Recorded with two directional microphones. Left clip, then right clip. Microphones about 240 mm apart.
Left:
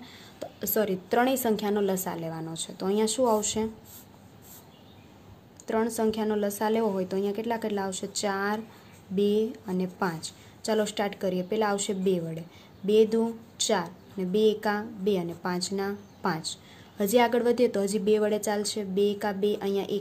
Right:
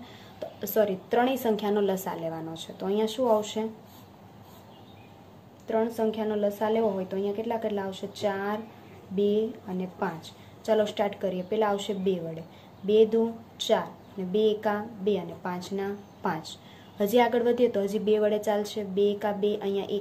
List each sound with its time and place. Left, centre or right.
0.0 s a sound: left
0.7 s a woman's voice: left
5.7 s a woman's voice: left